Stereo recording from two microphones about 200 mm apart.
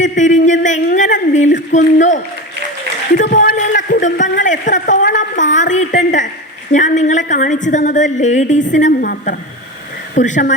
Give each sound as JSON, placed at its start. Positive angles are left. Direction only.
{"t": 0.0, "sound": "a woman's voice", "side_deg": 40}
{"t": 3.2, "sound": "a sound", "side_deg": 45}
{"t": 6.7, "sound": "a woman's voice", "side_deg": 35}